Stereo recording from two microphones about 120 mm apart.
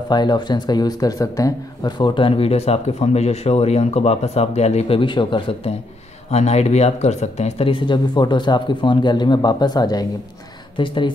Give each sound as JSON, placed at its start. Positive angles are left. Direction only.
{"t": 0.1, "sound": "speech", "side_deg": 35}
{"t": 6.3, "sound": "speech", "side_deg": 65}